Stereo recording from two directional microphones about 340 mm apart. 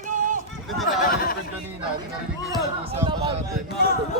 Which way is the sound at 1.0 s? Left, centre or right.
Left.